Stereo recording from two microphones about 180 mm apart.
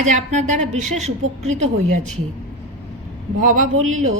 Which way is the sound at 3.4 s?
45° right (ahead or behind).